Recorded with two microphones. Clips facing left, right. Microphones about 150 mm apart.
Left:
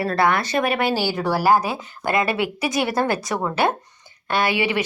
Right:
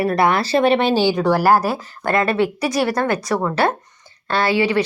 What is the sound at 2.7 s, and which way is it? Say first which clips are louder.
Speech: right 1 dB; 25° left (ahead or behind).